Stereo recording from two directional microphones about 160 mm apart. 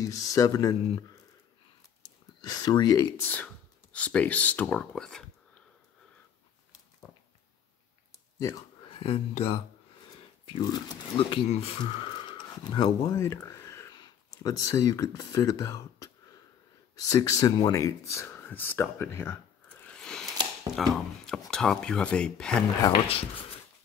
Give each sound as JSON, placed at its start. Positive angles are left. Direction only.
{"t": 0.0, "sound": "speech", "side_deg": 20}
{"t": 2.4, "sound": "speech", "side_deg": 25}
{"t": 3.9, "sound": "speech", "side_deg": 10}
{"t": 9.0, "sound": "speech", "side_deg": 35}
{"t": 17.1, "sound": "speech", "side_deg": 20}
{"t": 19.9, "sound": "a sound", "side_deg": 5}
{"t": 20.7, "sound": "speech", "side_deg": 0}
{"t": 22.8, "sound": "speech", "side_deg": 35}